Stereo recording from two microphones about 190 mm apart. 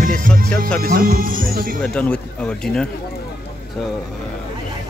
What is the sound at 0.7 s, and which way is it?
Speech, 50° right (ahead or behind).